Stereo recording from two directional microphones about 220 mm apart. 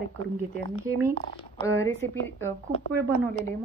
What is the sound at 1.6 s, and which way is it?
Speech, 15° left (ahead or behind).